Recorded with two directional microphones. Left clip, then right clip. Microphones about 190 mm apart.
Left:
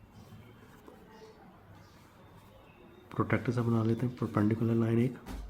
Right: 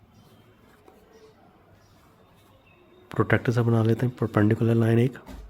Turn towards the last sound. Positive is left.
turn(degrees=-60)  # may be behind; listen again after turning